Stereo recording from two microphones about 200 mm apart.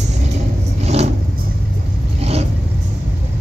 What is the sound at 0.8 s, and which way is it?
Vehicle, 35° right (ahead or behind).